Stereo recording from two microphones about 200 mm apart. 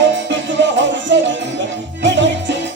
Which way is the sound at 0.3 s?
65° right (ahead or behind).